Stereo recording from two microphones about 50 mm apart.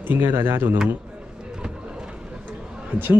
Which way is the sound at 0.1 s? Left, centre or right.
Right.